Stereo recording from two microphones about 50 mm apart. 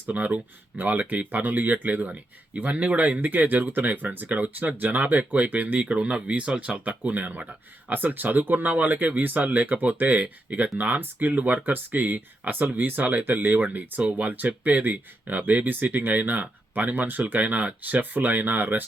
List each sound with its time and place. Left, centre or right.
0.1 s speech: right